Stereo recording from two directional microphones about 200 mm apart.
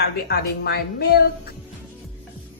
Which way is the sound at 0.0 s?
55° left (ahead or behind).